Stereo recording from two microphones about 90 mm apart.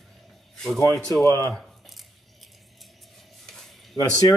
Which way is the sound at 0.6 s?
5° left (ahead or behind).